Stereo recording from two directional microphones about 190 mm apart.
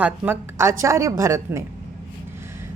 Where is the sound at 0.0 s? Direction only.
10° right (ahead or behind).